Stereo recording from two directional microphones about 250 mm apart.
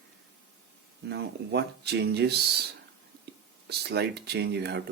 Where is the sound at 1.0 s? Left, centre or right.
Right.